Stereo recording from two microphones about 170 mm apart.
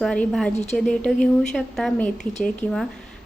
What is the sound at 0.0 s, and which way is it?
Speech, 5° left (ahead or behind).